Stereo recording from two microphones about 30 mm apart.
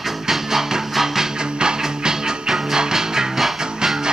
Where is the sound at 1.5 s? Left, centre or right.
Right.